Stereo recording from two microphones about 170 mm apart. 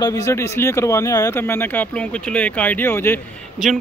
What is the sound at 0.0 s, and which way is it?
Speech, 20° left (ahead or behind).